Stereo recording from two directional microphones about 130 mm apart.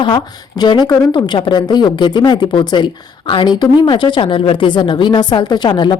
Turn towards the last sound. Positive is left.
turn(degrees=35)  # may be behind; listen again after turning